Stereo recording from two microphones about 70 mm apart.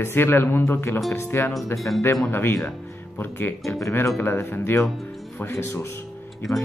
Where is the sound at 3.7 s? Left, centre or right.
Left.